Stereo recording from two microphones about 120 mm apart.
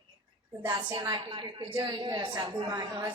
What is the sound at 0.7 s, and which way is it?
Speech, 40° right (ahead or behind).